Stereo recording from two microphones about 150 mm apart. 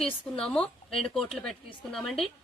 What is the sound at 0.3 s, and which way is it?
A woman's voice, 5° left (ahead or behind).